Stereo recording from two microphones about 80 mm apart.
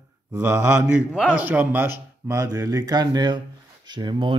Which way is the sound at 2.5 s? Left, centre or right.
Right.